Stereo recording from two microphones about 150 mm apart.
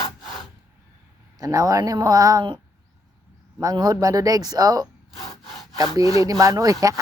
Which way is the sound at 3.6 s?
25° right (ahead or behind).